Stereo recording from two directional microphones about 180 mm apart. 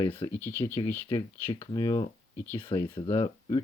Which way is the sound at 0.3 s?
10° left (ahead or behind).